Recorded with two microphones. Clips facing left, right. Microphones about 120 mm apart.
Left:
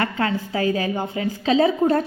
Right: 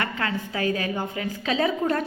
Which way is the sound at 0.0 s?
30° left (ahead or behind).